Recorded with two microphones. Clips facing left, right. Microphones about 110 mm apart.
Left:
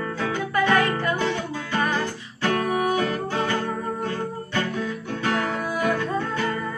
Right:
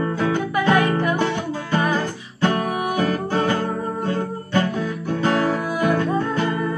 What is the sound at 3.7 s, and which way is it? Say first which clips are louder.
Guitar: right 4 dB; 25° right (ahead or behind).